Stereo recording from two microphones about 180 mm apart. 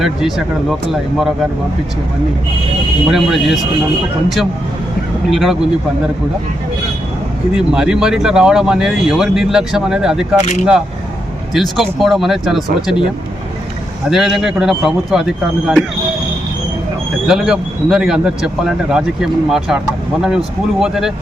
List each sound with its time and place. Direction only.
0.0 s speech: centre (ahead or behind)
3.1 s speech: centre (ahead or behind)
5.3 s speech: centre (ahead or behind)
7.5 s speech: 5° right (ahead or behind)
10.4 s speech: 40° left (ahead or behind)
11.5 s speech: centre (ahead or behind)
14.1 s speech: centre (ahead or behind)
17.2 s speech: 5° right (ahead or behind)